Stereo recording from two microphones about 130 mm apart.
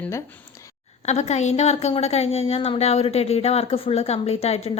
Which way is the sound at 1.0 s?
60° left (ahead or behind).